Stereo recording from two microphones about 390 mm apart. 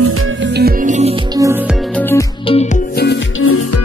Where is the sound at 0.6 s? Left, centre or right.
Right.